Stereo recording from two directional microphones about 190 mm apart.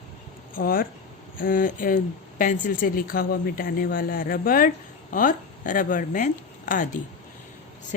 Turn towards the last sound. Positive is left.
turn(degrees=45)  # may be behind; listen again after turning